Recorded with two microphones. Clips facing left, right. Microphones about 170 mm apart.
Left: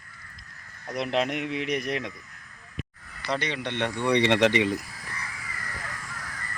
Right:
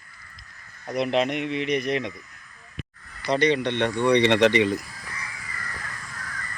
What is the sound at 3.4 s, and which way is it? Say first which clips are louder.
Speech: right 10 dB; 5° left (ahead or behind).